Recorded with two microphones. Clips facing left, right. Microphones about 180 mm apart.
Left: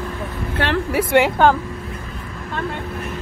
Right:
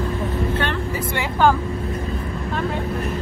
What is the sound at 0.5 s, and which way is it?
Speech, 75° left (ahead or behind).